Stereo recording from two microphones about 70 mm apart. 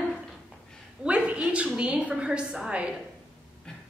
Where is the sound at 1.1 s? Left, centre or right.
Centre.